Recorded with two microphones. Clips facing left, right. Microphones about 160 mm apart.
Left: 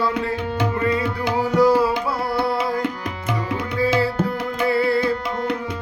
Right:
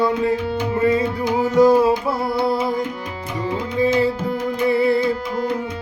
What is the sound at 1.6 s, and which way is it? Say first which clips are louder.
Music: right 3 dB; 20° right (ahead or behind).